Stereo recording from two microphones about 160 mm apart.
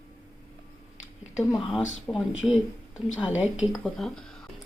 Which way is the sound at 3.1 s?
5° right (ahead or behind).